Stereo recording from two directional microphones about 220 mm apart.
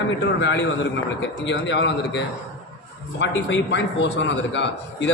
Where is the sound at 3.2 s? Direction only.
55° left (ahead or behind).